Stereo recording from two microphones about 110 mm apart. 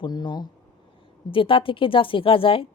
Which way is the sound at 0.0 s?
40° left (ahead or behind).